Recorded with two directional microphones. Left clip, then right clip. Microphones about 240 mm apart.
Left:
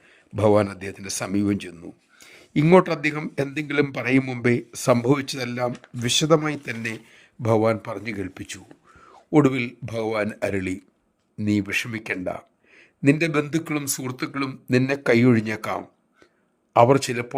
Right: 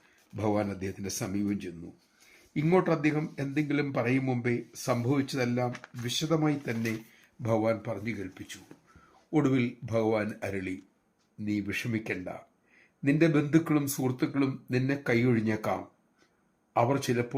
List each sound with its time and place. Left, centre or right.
0.3 s speech: left